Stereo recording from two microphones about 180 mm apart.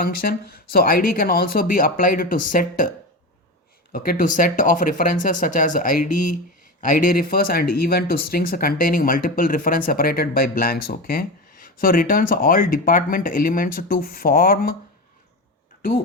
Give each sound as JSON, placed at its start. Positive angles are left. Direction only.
{"t": 0.0, "sound": "speech", "side_deg": 55}
{"t": 3.9, "sound": "speech", "side_deg": 55}